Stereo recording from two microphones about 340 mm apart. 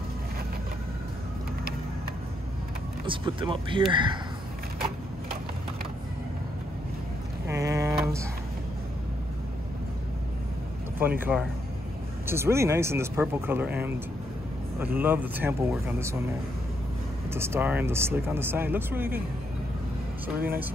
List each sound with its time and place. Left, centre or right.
3.1 s speech: centre
7.4 s a sound: centre
11.0 s speech: centre
17.3 s speech: centre
20.3 s speech: right